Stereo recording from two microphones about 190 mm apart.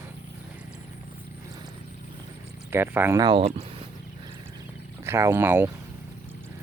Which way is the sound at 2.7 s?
10° right (ahead or behind).